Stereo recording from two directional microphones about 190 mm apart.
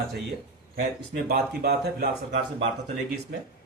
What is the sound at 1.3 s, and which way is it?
Speech, 55° right (ahead or behind).